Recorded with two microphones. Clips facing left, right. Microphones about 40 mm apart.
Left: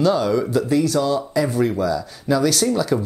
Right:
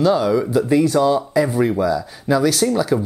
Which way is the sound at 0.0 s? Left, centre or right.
Centre.